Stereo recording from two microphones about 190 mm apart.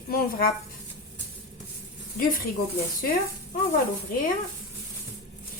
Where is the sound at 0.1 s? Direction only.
55° left (ahead or behind).